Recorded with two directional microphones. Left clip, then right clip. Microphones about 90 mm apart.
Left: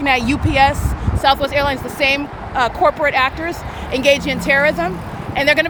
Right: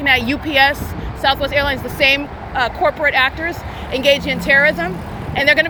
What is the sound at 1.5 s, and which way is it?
Speech, 45° left (ahead or behind).